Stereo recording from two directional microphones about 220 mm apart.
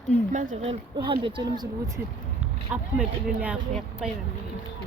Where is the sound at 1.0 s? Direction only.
20° right (ahead or behind).